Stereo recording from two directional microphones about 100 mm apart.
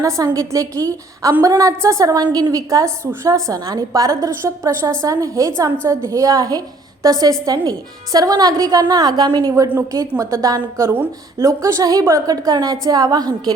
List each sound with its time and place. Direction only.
0.3 s a woman's voice: 35° right (ahead or behind)
11.4 s a woman's voice: 35° right (ahead or behind)